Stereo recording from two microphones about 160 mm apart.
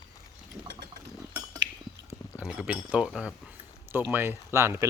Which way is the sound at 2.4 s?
5° right (ahead or behind).